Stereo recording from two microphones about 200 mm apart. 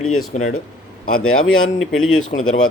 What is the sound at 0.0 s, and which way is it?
Speech, 90° left.